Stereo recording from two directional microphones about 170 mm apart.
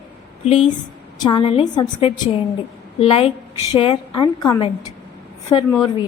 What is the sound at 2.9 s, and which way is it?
A woman's voice, 35° left (ahead or behind).